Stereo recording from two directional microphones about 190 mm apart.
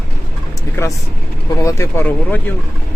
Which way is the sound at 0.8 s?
15° left (ahead or behind).